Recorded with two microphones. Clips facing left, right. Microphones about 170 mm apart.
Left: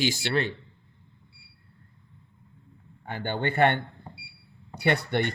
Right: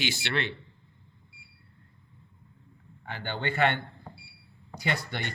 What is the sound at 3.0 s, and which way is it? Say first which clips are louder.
Speech: left 4 dB; 50° left (ahead or behind).